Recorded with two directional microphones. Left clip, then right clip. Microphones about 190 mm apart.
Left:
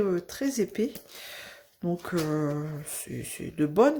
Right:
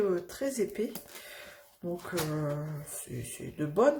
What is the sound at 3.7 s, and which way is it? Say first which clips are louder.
Speech: left 3 dB; 45° left (ahead or behind).